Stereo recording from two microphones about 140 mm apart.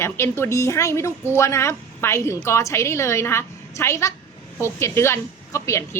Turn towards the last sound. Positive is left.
turn(degrees=20)  # may be behind; listen again after turning